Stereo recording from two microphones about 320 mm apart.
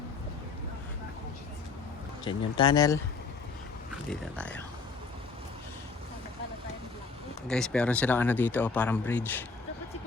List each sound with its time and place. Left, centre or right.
2.2 s speech: centre
4.1 s speech: centre
7.4 s speech: centre